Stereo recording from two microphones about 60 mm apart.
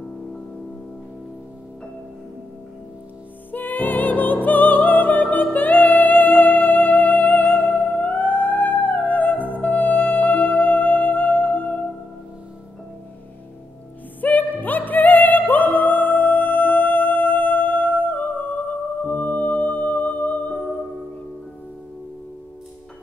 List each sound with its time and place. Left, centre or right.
3.5 s music: left
14.2 s music: left